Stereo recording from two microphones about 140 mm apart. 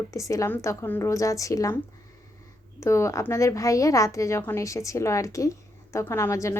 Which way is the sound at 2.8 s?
20° left (ahead or behind).